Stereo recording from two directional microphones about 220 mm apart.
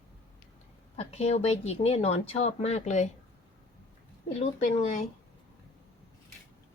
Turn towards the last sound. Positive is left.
turn(degrees=30)  # may be behind; listen again after turning